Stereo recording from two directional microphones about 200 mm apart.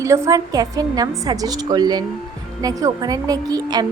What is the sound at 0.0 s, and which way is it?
A woman's voice, 15° right (ahead or behind).